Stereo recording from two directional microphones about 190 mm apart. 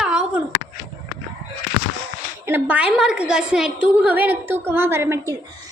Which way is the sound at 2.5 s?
10° right (ahead or behind).